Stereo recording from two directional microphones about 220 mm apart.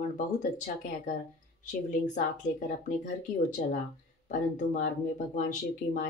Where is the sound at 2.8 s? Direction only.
35° left (ahead or behind).